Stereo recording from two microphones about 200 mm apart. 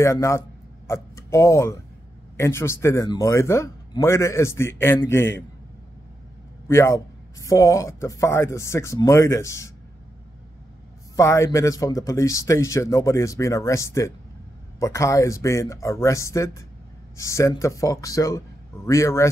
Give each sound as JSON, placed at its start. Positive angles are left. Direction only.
{"t": 0.0, "sound": "speech", "side_deg": 15}
{"t": 6.7, "sound": "speech", "side_deg": 15}
{"t": 11.1, "sound": "speech", "side_deg": 15}